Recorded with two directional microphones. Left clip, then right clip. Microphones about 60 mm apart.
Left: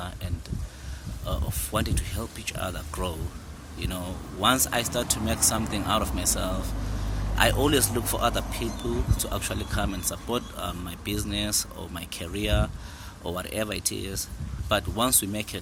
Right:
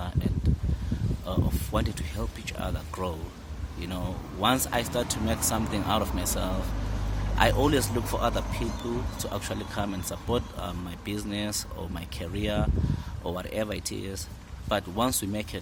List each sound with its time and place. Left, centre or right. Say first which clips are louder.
1.7 s speech: left 2 dB; right